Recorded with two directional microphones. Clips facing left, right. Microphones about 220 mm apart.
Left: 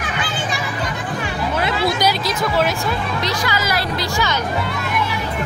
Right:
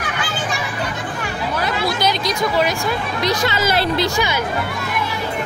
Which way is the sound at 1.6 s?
25° left (ahead or behind).